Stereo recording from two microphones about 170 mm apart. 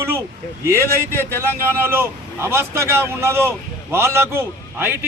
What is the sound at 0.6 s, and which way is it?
A man's voice, 15° right (ahead or behind).